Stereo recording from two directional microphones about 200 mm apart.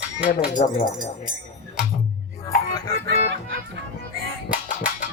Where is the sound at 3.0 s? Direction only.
60° right (ahead or behind).